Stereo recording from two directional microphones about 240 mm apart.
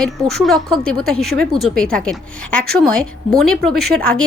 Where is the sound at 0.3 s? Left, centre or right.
Centre.